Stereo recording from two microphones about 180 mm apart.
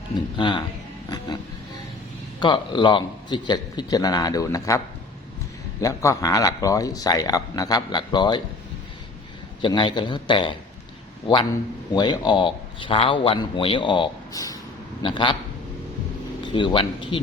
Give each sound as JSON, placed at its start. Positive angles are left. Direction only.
{"t": 0.3, "sound": "speech", "side_deg": 25}
{"t": 2.4, "sound": "speech", "side_deg": 25}
{"t": 5.8, "sound": "speech", "side_deg": 15}
{"t": 9.6, "sound": "speech", "side_deg": 25}
{"t": 16.4, "sound": "a man's voice", "side_deg": 25}